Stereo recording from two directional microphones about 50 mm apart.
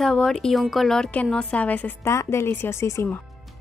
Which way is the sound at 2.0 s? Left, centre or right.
Left.